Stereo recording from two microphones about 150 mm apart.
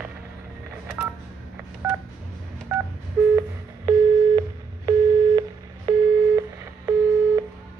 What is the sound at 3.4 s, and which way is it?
Sidetone, 20° right (ahead or behind).